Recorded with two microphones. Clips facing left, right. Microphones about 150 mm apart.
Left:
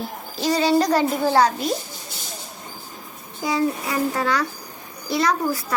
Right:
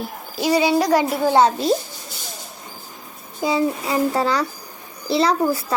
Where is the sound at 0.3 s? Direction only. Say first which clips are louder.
Right 1 dB; 10° right (ahead or behind).